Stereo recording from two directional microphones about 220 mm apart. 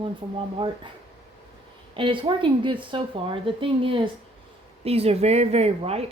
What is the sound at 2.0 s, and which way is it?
Speech, 20° right (ahead or behind).